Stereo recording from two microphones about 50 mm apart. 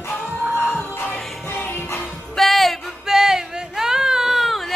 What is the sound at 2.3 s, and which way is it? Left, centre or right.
Music, centre.